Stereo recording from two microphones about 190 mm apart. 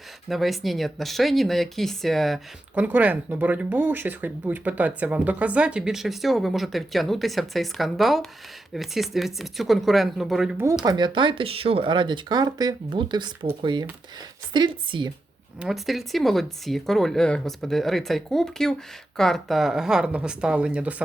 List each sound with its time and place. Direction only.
0.3 s speech: centre (ahead or behind)
10.8 s speech: 20° right (ahead or behind)
15.6 s speech: centre (ahead or behind)